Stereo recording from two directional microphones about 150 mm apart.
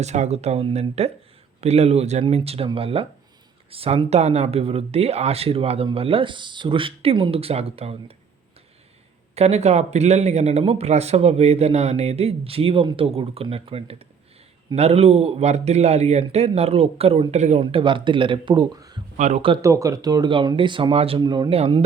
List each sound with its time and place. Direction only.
0.0 s speech: 50° right (ahead or behind)
9.3 s speech: 45° right (ahead or behind); by 18.9 s 25° right (ahead or behind)
19.1 s speech: 50° right (ahead or behind)
19.6 s speech: 20° right (ahead or behind); by 21.2 s 40° right (ahead or behind)
21.2 s speech: 30° right (ahead or behind)